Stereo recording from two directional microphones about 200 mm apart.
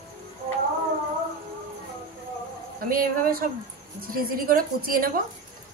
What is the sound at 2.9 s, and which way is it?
A woman's voice, 45° right (ahead or behind).